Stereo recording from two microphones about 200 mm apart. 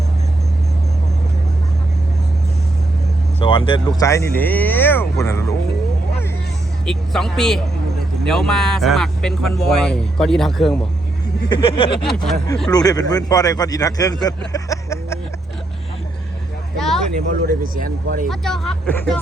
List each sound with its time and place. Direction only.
3.4 s speech: 25° left (ahead or behind)
6.8 s speech: centre (ahead or behind)
11.4 s speech: 25° left (ahead or behind)
12.0 s speech: centre (ahead or behind)
12.7 s speech: 20° left (ahead or behind)
16.7 s a sound: centre (ahead or behind)
17.4 s speech: 45° right (ahead or behind)
18.3 s speech: centre (ahead or behind)